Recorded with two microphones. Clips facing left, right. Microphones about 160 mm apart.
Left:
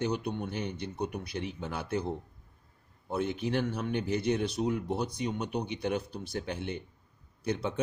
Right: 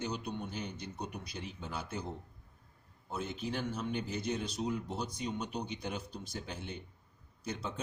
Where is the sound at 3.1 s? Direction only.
60° left (ahead or behind).